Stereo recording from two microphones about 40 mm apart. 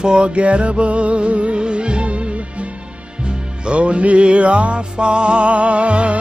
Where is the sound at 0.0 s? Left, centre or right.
Right.